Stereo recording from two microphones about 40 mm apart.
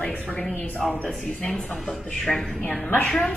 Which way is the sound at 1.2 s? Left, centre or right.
Left.